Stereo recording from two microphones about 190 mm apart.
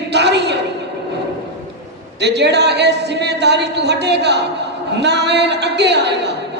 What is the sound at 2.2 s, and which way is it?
A man's voice, 65° right (ahead or behind).